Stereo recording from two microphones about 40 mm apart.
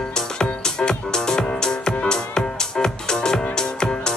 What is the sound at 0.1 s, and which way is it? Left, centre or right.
Music, centre.